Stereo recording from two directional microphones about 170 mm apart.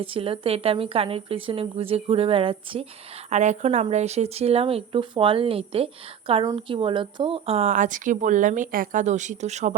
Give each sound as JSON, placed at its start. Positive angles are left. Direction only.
{"t": 0.0, "sound": "speech", "side_deg": -30}